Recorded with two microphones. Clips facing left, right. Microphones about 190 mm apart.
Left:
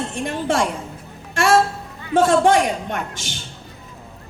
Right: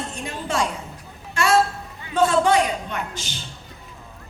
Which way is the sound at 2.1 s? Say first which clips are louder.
Left 3 dB; 50° left (ahead or behind).